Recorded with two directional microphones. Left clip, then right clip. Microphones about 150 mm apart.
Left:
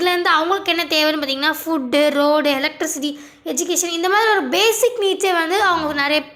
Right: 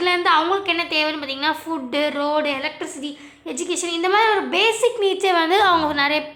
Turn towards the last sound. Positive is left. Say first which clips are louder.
# even
turn(degrees=10)  # may be behind; listen again after turning